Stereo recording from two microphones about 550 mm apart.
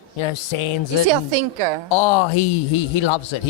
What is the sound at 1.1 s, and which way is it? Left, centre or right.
Speech, right.